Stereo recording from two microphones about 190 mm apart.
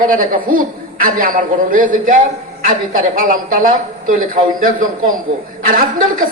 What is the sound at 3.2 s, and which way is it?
A woman's voice, 45° right (ahead or behind).